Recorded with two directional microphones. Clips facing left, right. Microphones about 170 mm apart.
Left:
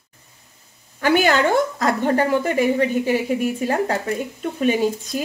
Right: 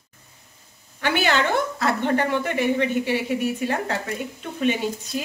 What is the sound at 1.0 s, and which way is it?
A woman's voice, 40° left (ahead or behind).